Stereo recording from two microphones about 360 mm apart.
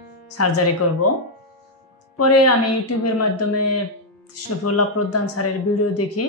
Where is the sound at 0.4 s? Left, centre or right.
Left.